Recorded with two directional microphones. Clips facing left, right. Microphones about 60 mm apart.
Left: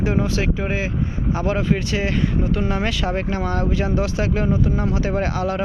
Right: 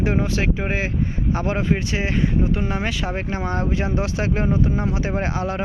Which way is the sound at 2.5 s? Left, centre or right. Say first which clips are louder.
Left 2 dB; centre.